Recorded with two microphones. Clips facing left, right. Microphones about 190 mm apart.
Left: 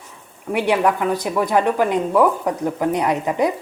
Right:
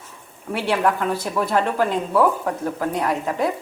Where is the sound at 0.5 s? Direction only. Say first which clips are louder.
Left 3 dB; 15° left (ahead or behind).